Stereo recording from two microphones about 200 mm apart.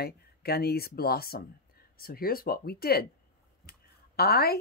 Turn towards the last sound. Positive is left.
turn(degrees=50)  # may be behind; listen again after turning